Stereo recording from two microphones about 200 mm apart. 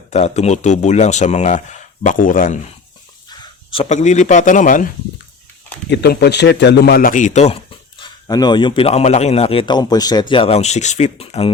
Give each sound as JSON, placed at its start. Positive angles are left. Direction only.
{"t": 0.1, "sound": "speech", "side_deg": 35}
{"t": 3.2, "sound": "speech", "side_deg": 25}
{"t": 5.9, "sound": "speech", "side_deg": 55}